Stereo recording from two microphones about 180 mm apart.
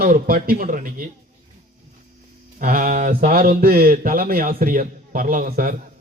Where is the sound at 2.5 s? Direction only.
50° right (ahead or behind).